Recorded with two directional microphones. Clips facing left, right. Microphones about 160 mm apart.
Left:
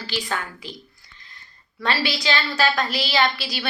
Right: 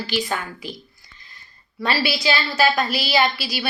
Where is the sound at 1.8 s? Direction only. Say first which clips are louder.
Right 2 dB; 10° right (ahead or behind).